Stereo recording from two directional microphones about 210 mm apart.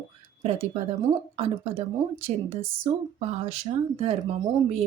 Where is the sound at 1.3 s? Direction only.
25° right (ahead or behind).